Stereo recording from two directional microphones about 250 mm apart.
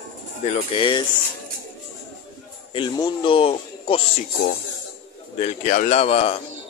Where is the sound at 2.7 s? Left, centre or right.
Centre.